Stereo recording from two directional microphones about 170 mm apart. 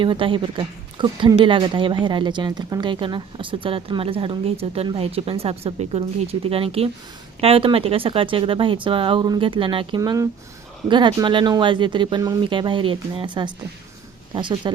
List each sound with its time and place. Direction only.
0.0 s speech: 30° right (ahead or behind)